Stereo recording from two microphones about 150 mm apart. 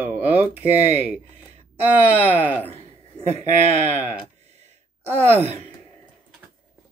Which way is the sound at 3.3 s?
45° right (ahead or behind).